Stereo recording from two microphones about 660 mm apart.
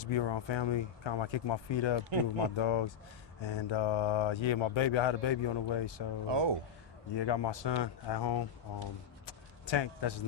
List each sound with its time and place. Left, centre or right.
0.0 s speech: left
6.2 s speech: right
7.1 s speech: left